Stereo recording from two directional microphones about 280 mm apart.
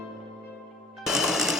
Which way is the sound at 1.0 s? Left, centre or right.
Centre.